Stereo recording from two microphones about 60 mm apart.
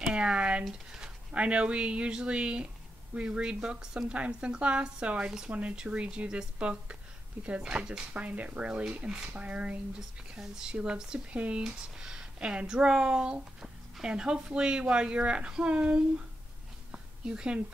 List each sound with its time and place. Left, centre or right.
0.0 s speech: centre
9.9 s speech: centre
16.9 s a sound: centre